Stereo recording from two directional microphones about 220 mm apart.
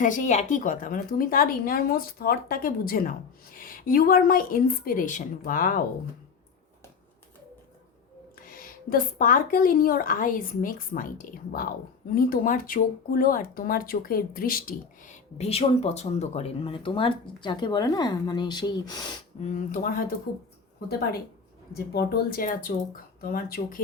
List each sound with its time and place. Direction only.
0.0 s a woman's voice: 35° left (ahead or behind)
8.4 s a woman's voice: 40° left (ahead or behind); by 19.2 s 20° left (ahead or behind)
19.4 s a woman's voice: 35° left (ahead or behind)
21.7 s a woman's voice: 45° left (ahead or behind)